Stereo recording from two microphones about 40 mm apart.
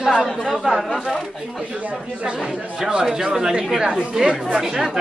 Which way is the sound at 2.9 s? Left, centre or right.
Centre.